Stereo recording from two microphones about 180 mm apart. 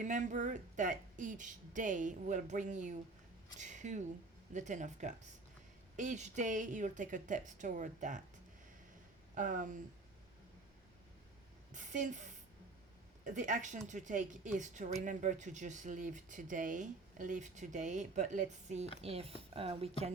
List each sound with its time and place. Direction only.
0.0 s speech: 45° right (ahead or behind)
9.3 s speech: 45° right (ahead or behind)
11.7 s a sound: 45° right (ahead or behind)
13.2 s speech: 45° right (ahead or behind)